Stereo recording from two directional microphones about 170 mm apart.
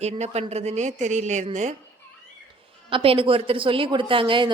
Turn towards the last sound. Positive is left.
turn(degrees=-30)  # may be behind; listen again after turning